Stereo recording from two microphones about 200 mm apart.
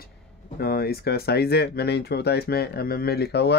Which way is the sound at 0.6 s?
50° left (ahead or behind).